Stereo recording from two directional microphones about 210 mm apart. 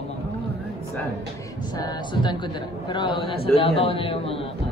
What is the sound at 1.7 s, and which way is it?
A man's voice, 20° left (ahead or behind).